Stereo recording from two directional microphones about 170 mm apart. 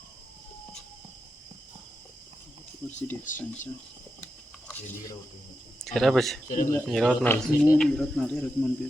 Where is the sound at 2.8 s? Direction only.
15° left (ahead or behind).